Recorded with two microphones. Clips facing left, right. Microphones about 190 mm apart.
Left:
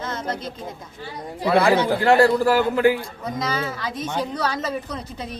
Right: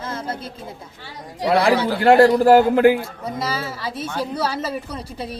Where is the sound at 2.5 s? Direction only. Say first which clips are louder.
Right 5 dB; 55° right (ahead or behind).